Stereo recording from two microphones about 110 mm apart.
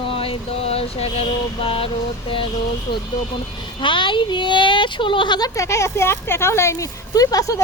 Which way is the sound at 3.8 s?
50° left (ahead or behind).